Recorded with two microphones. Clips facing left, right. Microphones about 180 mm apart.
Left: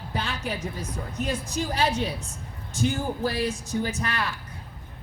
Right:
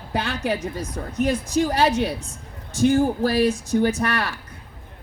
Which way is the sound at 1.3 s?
65° right (ahead or behind).